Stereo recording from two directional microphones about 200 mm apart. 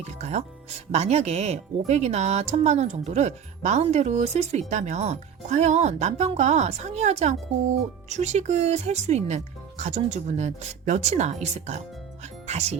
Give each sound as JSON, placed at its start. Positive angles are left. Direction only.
{"t": 0.0, "sound": "speech", "side_deg": -35}
{"t": 12.2, "sound": "music", "side_deg": -35}